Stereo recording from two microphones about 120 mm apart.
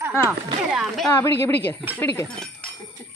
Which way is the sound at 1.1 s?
20° left (ahead or behind).